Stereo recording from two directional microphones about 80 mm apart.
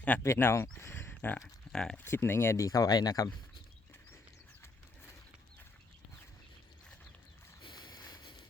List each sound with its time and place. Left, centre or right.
0.2 s speech: left
0.8 s a sound: left
1.7 s speech: centre
2.0 s speech: left
7.6 s boat: left